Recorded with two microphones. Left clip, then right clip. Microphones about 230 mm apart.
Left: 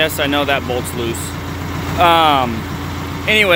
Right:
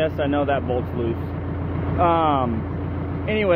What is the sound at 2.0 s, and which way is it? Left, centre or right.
Speech, centre.